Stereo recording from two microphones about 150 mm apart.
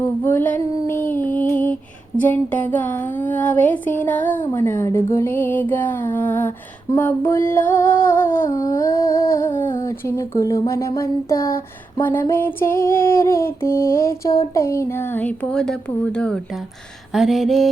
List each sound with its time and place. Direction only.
0.0 s female singing: 15° left (ahead or behind)
2.1 s speech: 10° left (ahead or behind)
17.2 s a sound: centre (ahead or behind)